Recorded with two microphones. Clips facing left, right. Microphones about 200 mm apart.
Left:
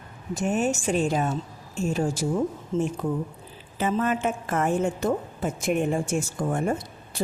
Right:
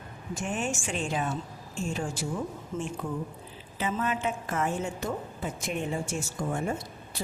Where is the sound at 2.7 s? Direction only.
25° left (ahead or behind).